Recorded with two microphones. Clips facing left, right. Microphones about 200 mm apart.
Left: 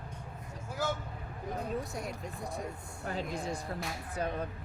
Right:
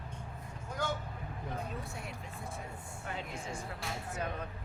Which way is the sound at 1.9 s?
40° left (ahead or behind).